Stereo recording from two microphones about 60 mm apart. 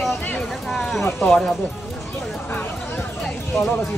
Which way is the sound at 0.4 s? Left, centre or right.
Centre.